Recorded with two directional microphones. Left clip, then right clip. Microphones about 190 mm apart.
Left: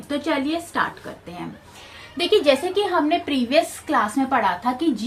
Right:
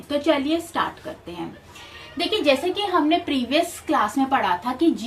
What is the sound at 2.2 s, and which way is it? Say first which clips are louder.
A woman's voice: left 3 dB; 45° left (ahead or behind).